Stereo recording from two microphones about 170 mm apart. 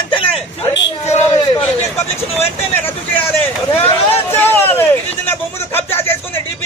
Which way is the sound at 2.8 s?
10° left (ahead or behind).